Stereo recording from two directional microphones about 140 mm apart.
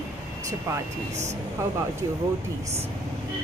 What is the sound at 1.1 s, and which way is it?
Speech, 55° right (ahead or behind).